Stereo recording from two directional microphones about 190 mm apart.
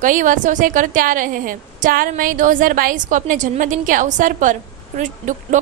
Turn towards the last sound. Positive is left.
turn(degrees=-40)  # may be behind; listen again after turning